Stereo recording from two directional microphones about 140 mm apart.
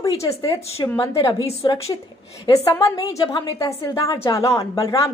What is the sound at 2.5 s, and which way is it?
A woman's voice, 20° left (ahead or behind).